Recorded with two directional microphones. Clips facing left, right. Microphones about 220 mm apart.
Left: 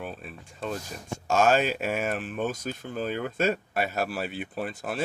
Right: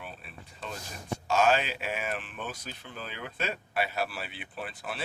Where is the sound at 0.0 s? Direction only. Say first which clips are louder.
Left 7 dB; 45° left (ahead or behind).